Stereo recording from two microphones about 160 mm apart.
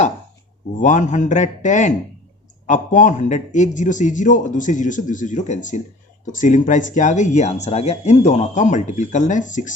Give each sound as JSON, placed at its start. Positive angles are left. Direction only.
{"t": 0.8, "sound": "speech", "side_deg": 50}